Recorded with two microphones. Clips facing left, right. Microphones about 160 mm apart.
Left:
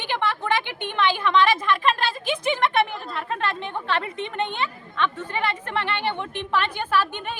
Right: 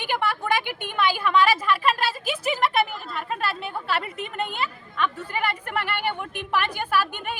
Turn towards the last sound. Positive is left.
turn(degrees=-10)  # may be behind; listen again after turning